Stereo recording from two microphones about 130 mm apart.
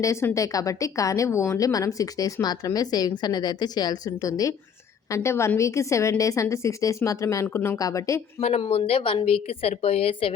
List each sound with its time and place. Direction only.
0.0 s speech: 20° left (ahead or behind)
8.4 s speech: 55° left (ahead or behind)
8.6 s a woman's voice: 45° left (ahead or behind)